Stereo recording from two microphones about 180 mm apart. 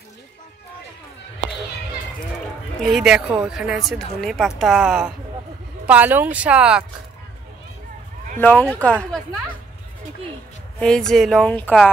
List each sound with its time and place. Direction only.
2.8 s speech: centre (ahead or behind)
8.4 s speech: 10° left (ahead or behind)
10.8 s speech: 5° left (ahead or behind)